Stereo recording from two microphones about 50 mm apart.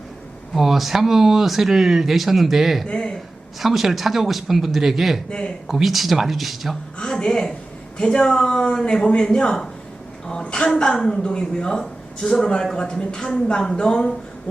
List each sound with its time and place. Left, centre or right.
0.5 s speech: centre
2.8 s speech: centre
3.6 s speech: centre
7.0 s speech: centre
10.2 s a sound: centre
10.8 s speech: centre